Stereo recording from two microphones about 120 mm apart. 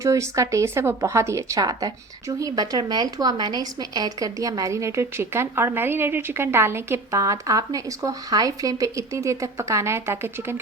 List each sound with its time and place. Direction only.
0.0 s speech: 25° right (ahead or behind)